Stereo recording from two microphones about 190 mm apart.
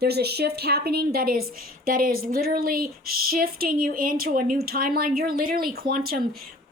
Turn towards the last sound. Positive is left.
turn(degrees=-50)  # may be behind; listen again after turning